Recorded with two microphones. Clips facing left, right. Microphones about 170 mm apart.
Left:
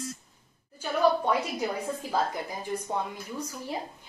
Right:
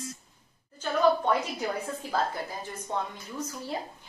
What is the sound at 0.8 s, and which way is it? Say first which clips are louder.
A woman's voice: even; 10° left (ahead or behind).